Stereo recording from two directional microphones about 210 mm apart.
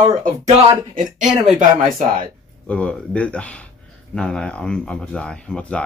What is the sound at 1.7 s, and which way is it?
Speech, 35° right (ahead or behind).